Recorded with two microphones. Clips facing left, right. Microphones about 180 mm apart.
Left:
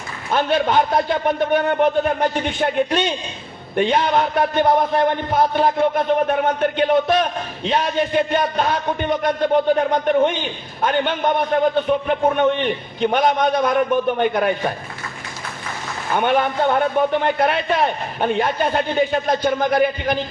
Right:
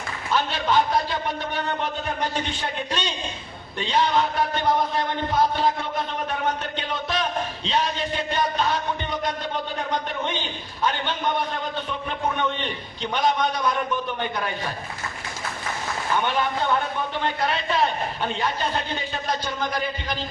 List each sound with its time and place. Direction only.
0.3 s speech: 55° left (ahead or behind)
10.8 s speech: 55° left (ahead or behind)
16.1 s speech: 50° left (ahead or behind)